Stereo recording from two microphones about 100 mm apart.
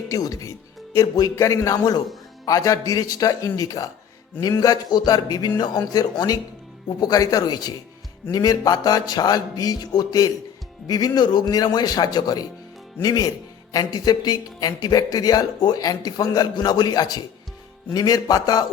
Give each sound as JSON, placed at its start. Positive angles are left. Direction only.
{"t": 0.1, "sound": "a man's voice", "side_deg": 35}